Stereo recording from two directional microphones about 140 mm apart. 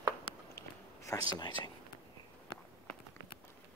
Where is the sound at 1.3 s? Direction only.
30° left (ahead or behind).